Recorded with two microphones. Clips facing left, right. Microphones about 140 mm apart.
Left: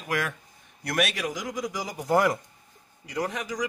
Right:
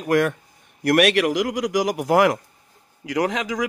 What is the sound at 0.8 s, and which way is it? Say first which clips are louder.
A man's voice: right 11 dB; 70° right (ahead or behind).